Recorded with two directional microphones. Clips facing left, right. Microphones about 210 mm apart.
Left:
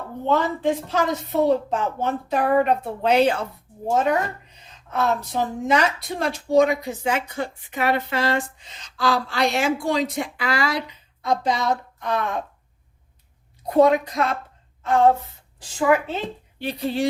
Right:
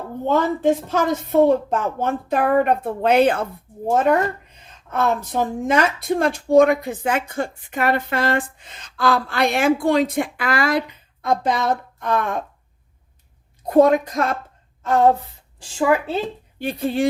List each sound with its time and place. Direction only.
0.3 s a woman's voice: 45° right (ahead or behind)
13.7 s a woman's voice: 45° right (ahead or behind)
14.8 s a sound: 40° right (ahead or behind)
16.6 s a woman's voice: 50° right (ahead or behind)